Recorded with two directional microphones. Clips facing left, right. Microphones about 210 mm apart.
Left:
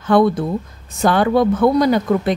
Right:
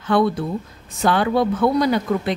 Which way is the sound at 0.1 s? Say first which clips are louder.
Left 4 dB; 45° left (ahead or behind).